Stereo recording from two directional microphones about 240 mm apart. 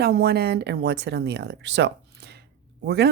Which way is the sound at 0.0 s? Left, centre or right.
Right.